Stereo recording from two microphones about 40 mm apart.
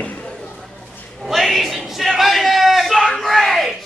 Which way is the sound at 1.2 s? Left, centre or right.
Centre.